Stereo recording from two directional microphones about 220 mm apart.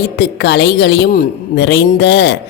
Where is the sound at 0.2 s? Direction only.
50° left (ahead or behind).